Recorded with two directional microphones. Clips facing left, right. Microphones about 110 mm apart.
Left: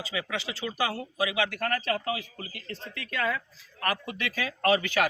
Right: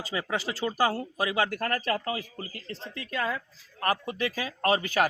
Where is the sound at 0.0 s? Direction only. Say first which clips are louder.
Right 2 dB; 40° right (ahead or behind).